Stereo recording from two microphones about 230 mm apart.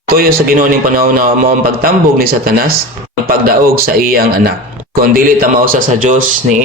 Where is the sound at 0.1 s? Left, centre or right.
Right.